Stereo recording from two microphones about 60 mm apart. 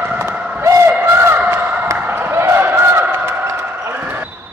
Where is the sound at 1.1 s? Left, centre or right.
Right.